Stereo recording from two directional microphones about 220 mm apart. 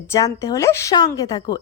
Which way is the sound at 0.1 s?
15° left (ahead or behind).